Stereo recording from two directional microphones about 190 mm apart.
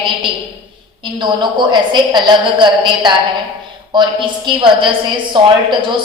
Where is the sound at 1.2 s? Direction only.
25° right (ahead or behind).